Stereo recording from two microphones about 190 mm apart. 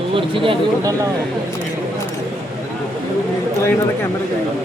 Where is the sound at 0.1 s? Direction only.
25° right (ahead or behind).